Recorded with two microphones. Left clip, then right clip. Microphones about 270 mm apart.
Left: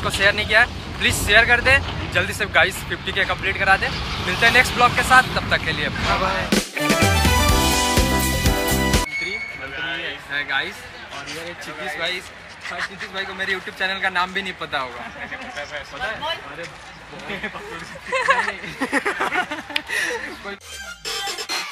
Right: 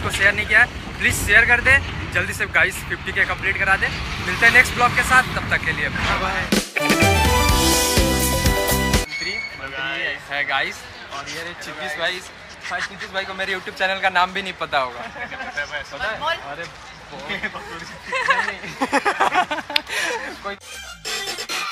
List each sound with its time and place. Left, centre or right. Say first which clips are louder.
0.0 s speech: even; centre
4.0 s speech: left 1 dB; centre
4.3 s speech: right 2 dB; centre
6.3 s music: even; centre
12.6 s speech: right 2 dB; centre
13.1 s speech: right 1 dB; right
18.1 s speech: left 1 dB; centre
18.8 s speech: right 4 dB; right